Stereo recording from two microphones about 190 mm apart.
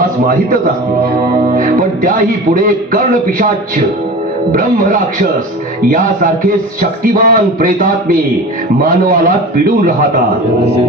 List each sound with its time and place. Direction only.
1.5 s speech: 45° right (ahead or behind)
7.0 s speech: 50° right (ahead or behind)